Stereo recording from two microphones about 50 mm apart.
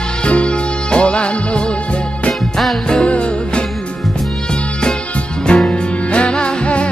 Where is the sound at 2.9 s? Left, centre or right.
Centre.